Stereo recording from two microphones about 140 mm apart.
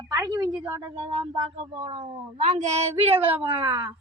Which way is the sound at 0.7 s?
30° right (ahead or behind).